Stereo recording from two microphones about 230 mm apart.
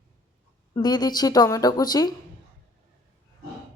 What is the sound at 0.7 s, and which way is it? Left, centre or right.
Speech, centre.